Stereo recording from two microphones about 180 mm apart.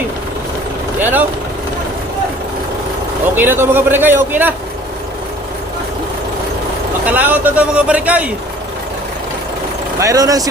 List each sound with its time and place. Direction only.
0.9 s speech: 10° right (ahead or behind)
3.3 s speech: 10° right (ahead or behind)
7.1 s speech: 10° right (ahead or behind)
10.0 s speech: 20° right (ahead or behind)